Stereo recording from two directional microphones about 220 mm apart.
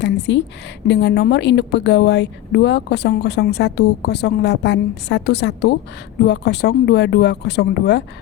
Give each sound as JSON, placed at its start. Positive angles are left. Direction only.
{"t": 0.0, "sound": "a woman's voice", "side_deg": 55}